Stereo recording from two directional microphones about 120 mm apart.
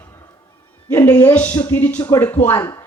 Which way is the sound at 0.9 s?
15° left (ahead or behind).